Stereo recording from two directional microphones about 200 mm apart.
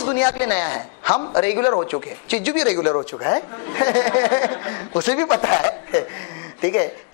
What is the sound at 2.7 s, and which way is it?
Speech, 25° left (ahead or behind).